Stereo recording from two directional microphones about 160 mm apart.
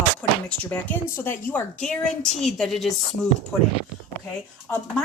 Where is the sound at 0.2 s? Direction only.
10° left (ahead or behind).